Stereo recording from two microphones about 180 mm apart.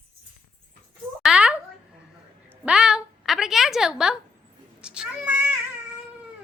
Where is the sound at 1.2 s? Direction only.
5° right (ahead or behind).